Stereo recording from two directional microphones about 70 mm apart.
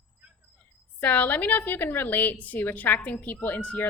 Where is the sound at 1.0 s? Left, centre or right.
Left.